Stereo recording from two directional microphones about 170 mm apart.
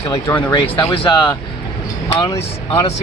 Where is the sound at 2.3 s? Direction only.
35° left (ahead or behind).